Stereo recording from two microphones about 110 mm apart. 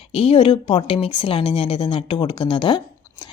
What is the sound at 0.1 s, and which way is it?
A woman's voice, 55° left (ahead or behind).